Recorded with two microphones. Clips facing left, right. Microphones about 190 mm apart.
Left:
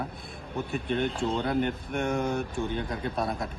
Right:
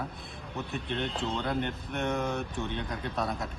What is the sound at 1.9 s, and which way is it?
Speech, 50° left (ahead or behind).